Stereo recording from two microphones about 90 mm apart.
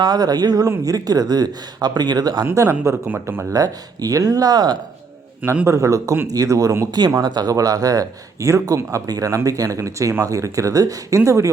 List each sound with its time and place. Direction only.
0.0 s speech: 50° right (ahead or behind)
2.4 s speech: 30° right (ahead or behind)
3.5 s speech: 40° right (ahead or behind)
5.6 s speech: 35° right (ahead or behind)
7.1 s speech: 50° right (ahead or behind)